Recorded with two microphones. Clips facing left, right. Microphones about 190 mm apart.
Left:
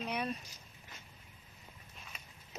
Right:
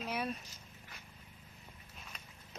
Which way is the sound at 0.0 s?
5° right (ahead or behind).